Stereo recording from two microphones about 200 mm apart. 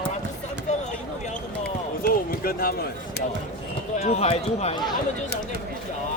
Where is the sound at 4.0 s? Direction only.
35° left (ahead or behind).